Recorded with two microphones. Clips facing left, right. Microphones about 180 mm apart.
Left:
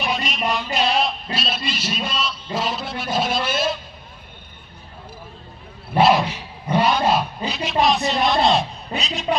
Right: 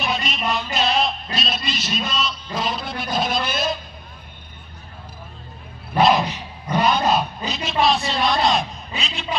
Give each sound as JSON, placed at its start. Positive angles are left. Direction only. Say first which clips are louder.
{"t": 0.0, "sound": "a sound", "louder": "left 1 dB", "side_deg": 10}
{"t": 1.7, "sound": "a man's voice", "louder": "even", "side_deg": 10}
{"t": 2.5, "sound": "a sound", "louder": "left 2 dB", "side_deg": 5}
{"t": 6.0, "sound": "dog", "louder": "even", "side_deg": 10}
{"t": 6.7, "sound": "roaring cats", "louder": "left 2 dB", "side_deg": 25}
{"t": 7.4, "sound": "a woman's voice", "louder": "left 2 dB", "side_deg": 10}